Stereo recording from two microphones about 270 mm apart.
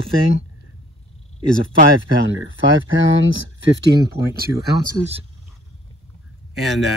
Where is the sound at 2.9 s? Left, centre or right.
Right.